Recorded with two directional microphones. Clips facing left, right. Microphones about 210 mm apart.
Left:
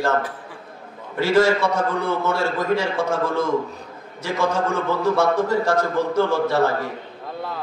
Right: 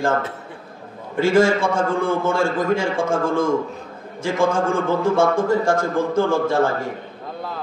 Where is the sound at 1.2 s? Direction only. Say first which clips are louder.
Right 1 dB; 50° right (ahead or behind).